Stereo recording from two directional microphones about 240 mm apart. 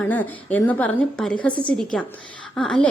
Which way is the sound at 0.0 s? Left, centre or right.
Centre.